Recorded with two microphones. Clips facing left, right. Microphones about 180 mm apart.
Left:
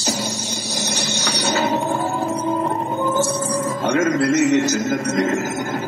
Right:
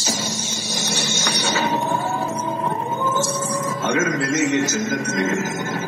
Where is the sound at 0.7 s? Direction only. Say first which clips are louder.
Even; 35° left (ahead or behind).